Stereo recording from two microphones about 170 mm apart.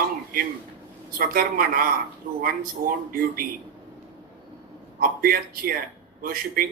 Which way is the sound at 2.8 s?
60° right (ahead or behind).